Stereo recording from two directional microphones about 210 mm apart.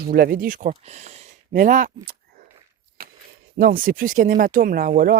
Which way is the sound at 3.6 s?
45° right (ahead or behind).